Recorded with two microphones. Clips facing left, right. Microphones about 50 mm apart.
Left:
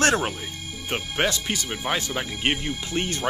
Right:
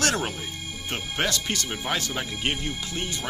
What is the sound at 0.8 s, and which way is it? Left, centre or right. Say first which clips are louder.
Speech: left 3 dB; centre.